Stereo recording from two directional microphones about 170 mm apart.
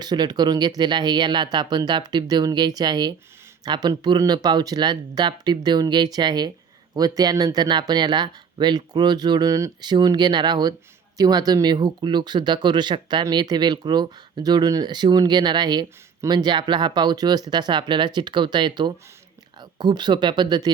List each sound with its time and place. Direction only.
0.0 s speech: 25° right (ahead or behind)